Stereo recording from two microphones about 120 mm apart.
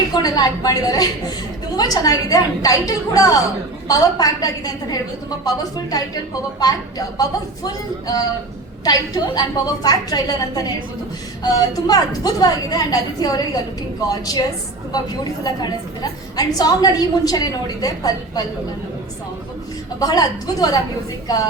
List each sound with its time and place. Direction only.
0.1 s a woman's voice: 35° left (ahead or behind)
20.0 s a woman's voice: 30° left (ahead or behind)